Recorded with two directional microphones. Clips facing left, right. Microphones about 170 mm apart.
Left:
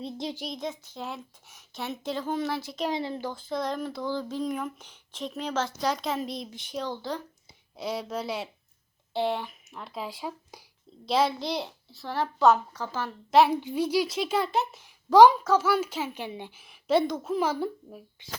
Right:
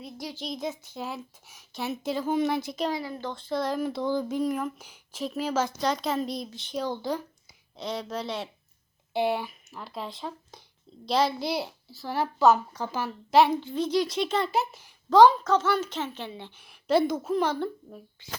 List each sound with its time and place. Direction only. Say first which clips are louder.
0.0 s a child's voice: left 4 dB; 25° left (ahead or behind)
0.4 s speech: right 1 dB; 5° right (ahead or behind)
2.9 s a child's voice: left 2 dB; 25° left (ahead or behind)
3.2 s speech: right 1 dB; 5° left (ahead or behind)
3.9 s a child's voice: right 4 dB; 15° right (ahead or behind)
4.4 s speech: right 3 dB; centre (ahead or behind)
6.5 s a woman's voice: even; 15° left (ahead or behind)
6.9 s a child's voice: right 3 dB; 15° right (ahead or behind)
7.8 s speech: left 1 dB; 5° left (ahead or behind)
9.1 s a child's voice: right 2 dB; 10° right (ahead or behind)
13.5 s a woman's voice: even; 10° left (ahead or behind)
15.1 s a woman's voice: left 1 dB; 15° left (ahead or behind)
16.6 s speech: right 1 dB; centre (ahead or behind)